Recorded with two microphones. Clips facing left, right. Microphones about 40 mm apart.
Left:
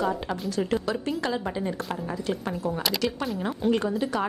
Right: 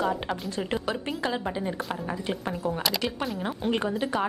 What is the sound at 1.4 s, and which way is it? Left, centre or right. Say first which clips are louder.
Speech: even; centre.